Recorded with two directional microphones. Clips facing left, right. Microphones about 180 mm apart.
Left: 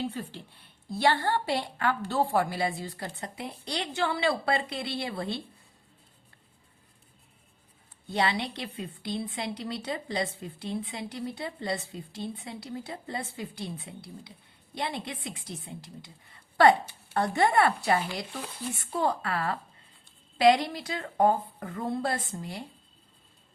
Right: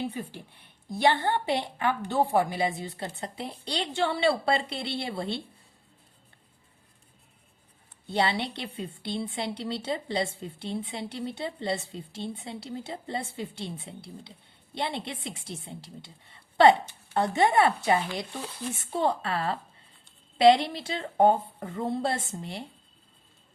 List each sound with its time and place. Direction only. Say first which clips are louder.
0.0 s speech: even; 15° right (ahead or behind)
8.1 s speech: right 1 dB; 30° right (ahead or behind)